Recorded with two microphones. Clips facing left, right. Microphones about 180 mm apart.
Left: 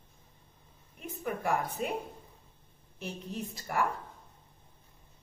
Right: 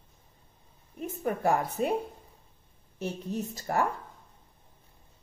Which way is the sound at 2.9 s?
40° right (ahead or behind).